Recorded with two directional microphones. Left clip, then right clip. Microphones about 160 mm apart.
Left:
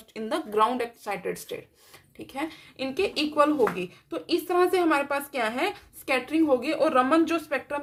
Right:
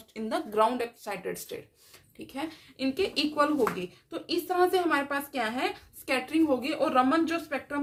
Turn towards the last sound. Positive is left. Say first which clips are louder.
# left 4 dB
turn(degrees=30)  # may be behind; listen again after turning